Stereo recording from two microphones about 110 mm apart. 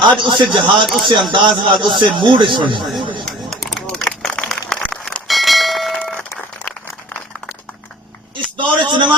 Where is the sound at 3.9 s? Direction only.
5° left (ahead or behind).